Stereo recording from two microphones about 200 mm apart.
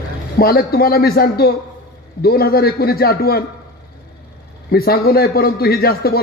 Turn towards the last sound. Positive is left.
turn(degrees=50)  # may be behind; listen again after turning